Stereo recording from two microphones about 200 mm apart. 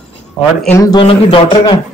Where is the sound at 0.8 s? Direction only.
20° left (ahead or behind).